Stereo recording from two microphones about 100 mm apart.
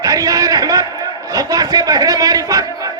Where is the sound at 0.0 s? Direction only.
35° right (ahead or behind).